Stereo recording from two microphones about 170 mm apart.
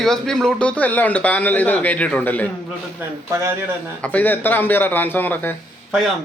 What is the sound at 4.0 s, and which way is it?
A man's voice, 10° left (ahead or behind).